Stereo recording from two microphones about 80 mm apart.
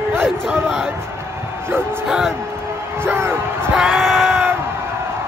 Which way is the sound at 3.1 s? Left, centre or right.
Right.